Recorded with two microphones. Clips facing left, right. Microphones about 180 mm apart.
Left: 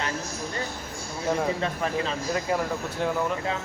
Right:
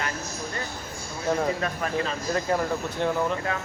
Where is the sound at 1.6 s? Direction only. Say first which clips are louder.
Left 1 dB; 25° left (ahead or behind).